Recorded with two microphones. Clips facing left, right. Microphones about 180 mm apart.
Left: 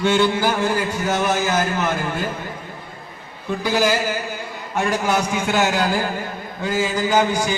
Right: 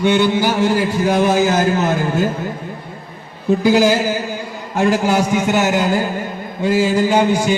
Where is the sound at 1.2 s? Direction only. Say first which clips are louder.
Right 6 dB; 35° right (ahead or behind).